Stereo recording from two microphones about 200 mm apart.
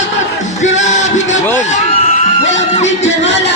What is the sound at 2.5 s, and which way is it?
Music, 35° left (ahead or behind).